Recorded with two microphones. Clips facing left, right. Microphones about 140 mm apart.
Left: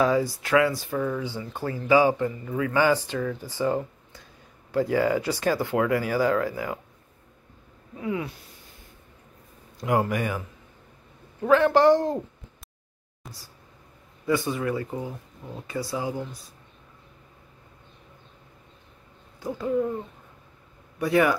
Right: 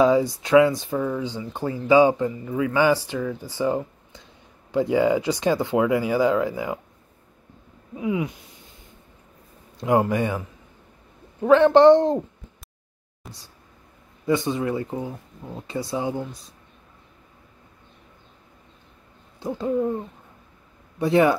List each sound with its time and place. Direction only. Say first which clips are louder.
0.0 s a man's voice: right 4 dB; 20° right (ahead or behind)
7.9 s a man's voice: right 4 dB; 10° right (ahead or behind)
9.8 s speech: right 4 dB; 25° right (ahead or behind)
11.4 s speech: right 5 dB; 25° right (ahead or behind)
13.2 s a sound: right 2 dB; centre (ahead or behind)
14.2 s speech: right 3 dB; 25° right (ahead or behind)
19.4 s speech: right 2 dB; 25° right (ahead or behind)
21.0 s speech: right 3 dB; 25° right (ahead or behind)